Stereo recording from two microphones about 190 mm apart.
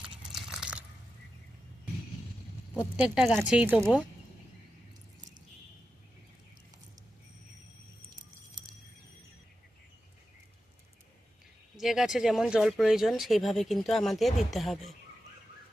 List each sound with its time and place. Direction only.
0.3 s biting: 5° right (ahead or behind)
3.0 s speech: 5° right (ahead or behind)
11.8 s speech: centre (ahead or behind)